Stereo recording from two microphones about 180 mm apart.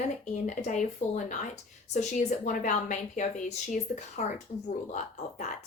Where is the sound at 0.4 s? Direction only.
45° left (ahead or behind).